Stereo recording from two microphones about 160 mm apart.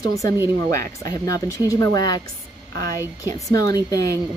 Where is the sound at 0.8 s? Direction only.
75° right (ahead or behind).